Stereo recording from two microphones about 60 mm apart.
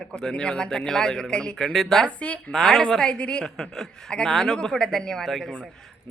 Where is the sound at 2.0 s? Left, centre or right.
Left.